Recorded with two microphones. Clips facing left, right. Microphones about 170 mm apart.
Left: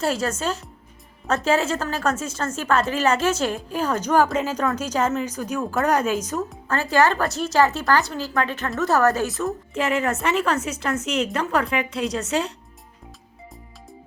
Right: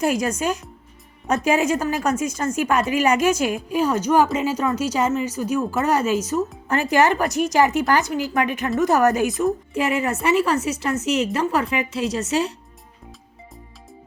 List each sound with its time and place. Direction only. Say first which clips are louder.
0.0 s speech: right 3 dB; 15° right (ahead or behind)
6.7 s speech: right 1 dB; 20° right (ahead or behind)